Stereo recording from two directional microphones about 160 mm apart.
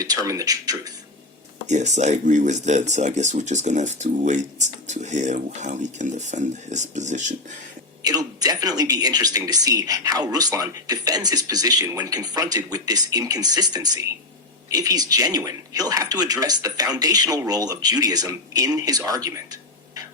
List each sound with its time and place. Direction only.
0.0 s speech: 20° right (ahead or behind)
1.6 s speech: 45° right (ahead or behind)
8.0 s speech: 25° right (ahead or behind)